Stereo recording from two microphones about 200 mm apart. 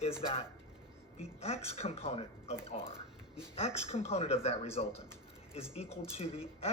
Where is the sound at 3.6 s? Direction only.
30° left (ahead or behind).